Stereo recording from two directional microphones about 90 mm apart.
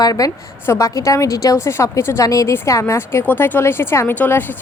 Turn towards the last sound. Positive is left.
turn(degrees=20)  # may be behind; listen again after turning